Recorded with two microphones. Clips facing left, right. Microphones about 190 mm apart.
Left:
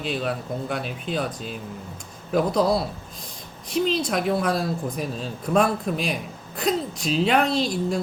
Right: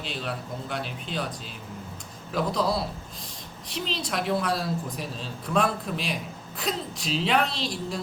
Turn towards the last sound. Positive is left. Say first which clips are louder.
# left 8 dB
turn(degrees=50)  # may be behind; listen again after turning